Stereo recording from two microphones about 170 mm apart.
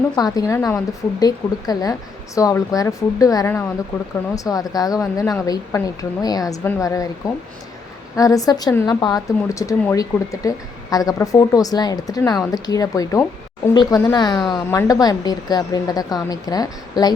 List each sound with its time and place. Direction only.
0.2 s speech: 20° left (ahead or behind)
8.1 s speech: 20° left (ahead or behind)